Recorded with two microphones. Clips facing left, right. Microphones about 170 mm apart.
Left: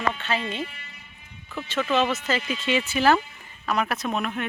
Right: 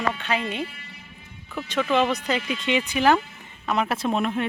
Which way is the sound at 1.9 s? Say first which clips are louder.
Right 1 dB; 15° right (ahead or behind).